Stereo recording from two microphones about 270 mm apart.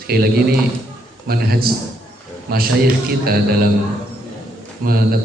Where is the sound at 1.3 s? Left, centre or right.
Right.